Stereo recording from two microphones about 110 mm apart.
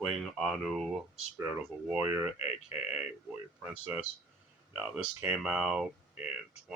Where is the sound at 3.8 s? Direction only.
15° right (ahead or behind).